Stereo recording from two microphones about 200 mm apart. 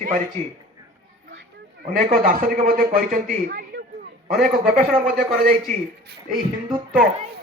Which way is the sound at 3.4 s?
50° right (ahead or behind).